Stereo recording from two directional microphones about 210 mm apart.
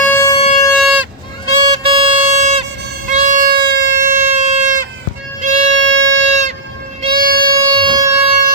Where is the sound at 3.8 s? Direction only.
40° right (ahead or behind).